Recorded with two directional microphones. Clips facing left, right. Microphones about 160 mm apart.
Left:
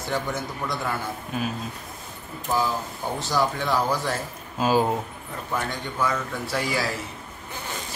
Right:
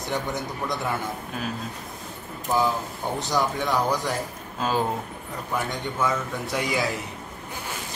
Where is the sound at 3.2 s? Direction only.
20° right (ahead or behind).